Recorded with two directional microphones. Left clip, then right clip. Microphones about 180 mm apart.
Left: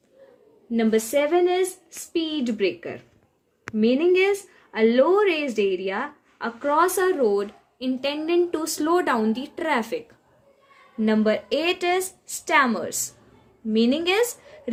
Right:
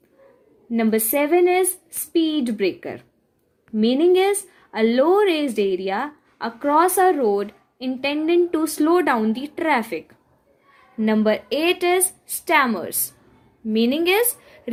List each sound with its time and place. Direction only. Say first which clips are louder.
0.7 s a woman's voice: right 1 dB; 50° right (ahead or behind)
11.0 s a woman's voice: right 2 dB; 35° right (ahead or behind)